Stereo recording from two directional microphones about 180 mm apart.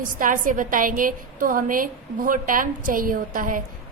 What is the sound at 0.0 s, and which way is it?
A woman's voice, 50° right (ahead or behind).